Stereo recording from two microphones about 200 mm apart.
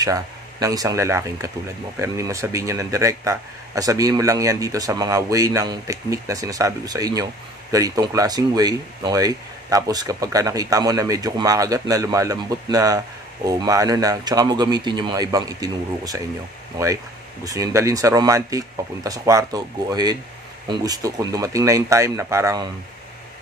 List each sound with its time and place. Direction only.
0.0 s speech: 15° right (ahead or behind)